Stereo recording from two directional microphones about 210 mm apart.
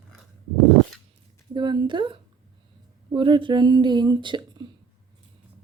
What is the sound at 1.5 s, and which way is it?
Speech, 20° right (ahead or behind).